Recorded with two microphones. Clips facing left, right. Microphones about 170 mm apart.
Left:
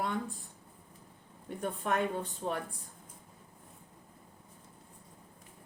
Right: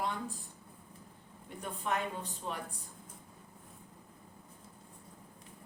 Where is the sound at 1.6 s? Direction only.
50° left (ahead or behind).